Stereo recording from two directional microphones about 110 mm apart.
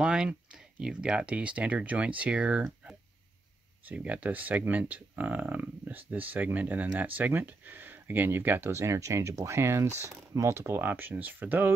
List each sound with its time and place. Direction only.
0.0 s speech: 10° right (ahead or behind)
3.8 s speech: 10° right (ahead or behind)